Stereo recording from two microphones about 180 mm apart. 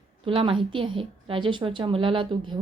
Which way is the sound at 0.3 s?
30° right (ahead or behind).